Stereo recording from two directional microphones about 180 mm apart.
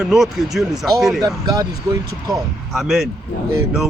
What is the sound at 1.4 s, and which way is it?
Speech, 20° right (ahead or behind).